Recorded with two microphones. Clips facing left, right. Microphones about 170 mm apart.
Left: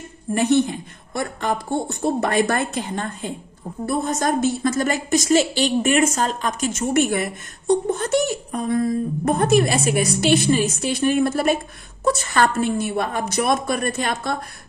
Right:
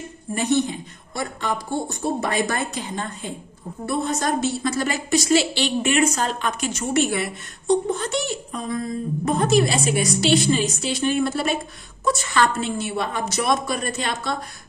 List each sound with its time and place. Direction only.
0.3 s a woman's voice: 55° left (ahead or behind)